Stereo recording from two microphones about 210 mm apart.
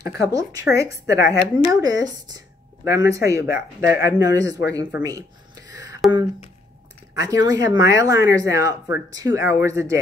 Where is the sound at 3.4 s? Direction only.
50° left (ahead or behind).